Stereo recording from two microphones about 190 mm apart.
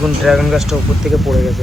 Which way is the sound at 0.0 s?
Centre (ahead or behind).